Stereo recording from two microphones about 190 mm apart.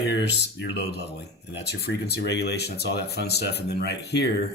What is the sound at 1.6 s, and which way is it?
Speech, 60° left (ahead or behind).